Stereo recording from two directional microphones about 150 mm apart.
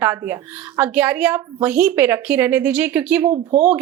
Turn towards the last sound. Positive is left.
turn(degrees=-45)  # may be behind; listen again after turning